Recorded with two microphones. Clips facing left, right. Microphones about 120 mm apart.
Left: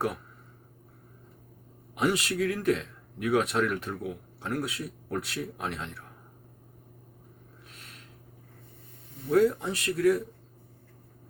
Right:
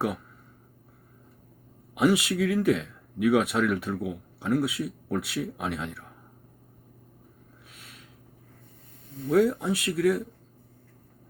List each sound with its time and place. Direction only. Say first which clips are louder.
2.0 s speech: right 4 dB; 5° right (ahead or behind)
9.3 s speech: right 1 dB; 5° right (ahead or behind)